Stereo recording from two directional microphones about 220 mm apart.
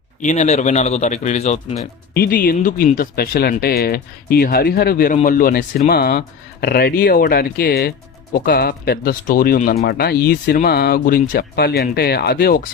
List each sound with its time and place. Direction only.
0.2 s speech: 35° left (ahead or behind)
2.1 s speech: 45° left (ahead or behind)